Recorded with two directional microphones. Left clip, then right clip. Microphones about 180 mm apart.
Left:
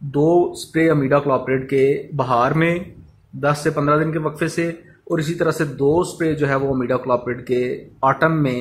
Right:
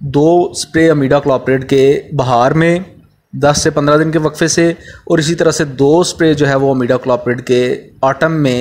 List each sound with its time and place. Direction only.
0.1 s speech: 25° right (ahead or behind)